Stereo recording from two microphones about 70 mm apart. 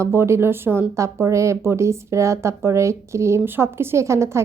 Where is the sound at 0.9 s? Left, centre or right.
Right.